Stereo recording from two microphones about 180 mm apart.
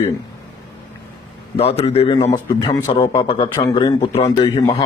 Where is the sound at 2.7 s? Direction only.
20° left (ahead or behind).